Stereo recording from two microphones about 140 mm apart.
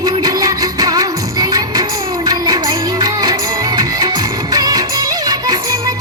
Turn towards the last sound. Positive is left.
turn(degrees=-30)  # may be behind; listen again after turning